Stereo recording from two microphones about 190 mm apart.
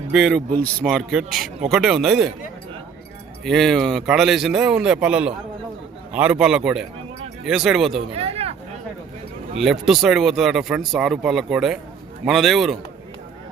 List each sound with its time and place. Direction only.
0.1 s speech: centre (ahead or behind)
3.4 s speech: centre (ahead or behind)
8.1 s speech: 30° right (ahead or behind)
9.6 s speech: centre (ahead or behind)